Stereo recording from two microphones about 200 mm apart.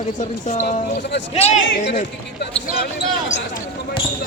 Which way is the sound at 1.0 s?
60° left (ahead or behind).